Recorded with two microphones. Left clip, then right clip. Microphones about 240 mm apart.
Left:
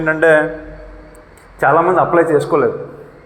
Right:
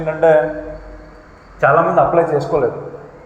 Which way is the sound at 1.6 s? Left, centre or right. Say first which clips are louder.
Even; left.